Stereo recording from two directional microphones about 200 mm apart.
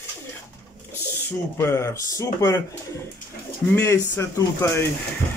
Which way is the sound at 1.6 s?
15° left (ahead or behind).